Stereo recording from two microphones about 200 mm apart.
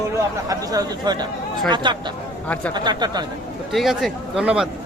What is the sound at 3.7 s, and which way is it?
Speech, centre (ahead or behind).